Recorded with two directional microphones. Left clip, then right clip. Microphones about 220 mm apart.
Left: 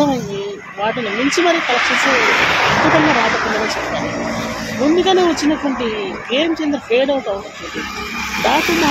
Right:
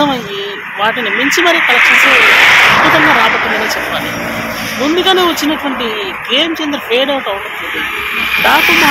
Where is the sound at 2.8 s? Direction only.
20° right (ahead or behind); by 4.4 s 35° right (ahead or behind).